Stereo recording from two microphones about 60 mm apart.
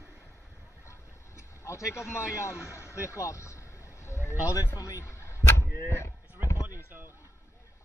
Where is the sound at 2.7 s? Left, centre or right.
Left.